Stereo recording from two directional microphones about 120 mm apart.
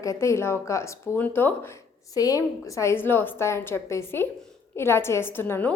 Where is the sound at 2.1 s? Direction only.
30° left (ahead or behind).